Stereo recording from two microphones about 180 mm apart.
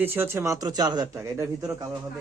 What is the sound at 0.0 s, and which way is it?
A man's voice, 10° right (ahead or behind).